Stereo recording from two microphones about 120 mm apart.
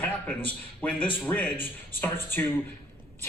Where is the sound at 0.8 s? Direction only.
15° left (ahead or behind).